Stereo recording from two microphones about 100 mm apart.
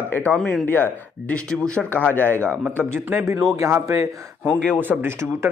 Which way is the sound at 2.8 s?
20° right (ahead or behind).